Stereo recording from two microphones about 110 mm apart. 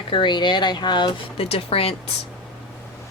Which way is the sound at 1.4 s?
60° left (ahead or behind).